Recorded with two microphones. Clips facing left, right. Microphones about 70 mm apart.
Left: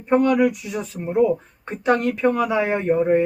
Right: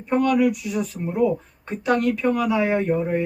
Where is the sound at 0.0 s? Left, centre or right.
Left.